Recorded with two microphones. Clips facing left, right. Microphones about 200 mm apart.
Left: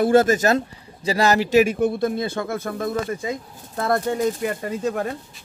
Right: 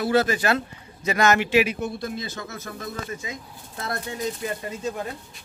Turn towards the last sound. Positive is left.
turn(degrees=60)  # may be behind; listen again after turning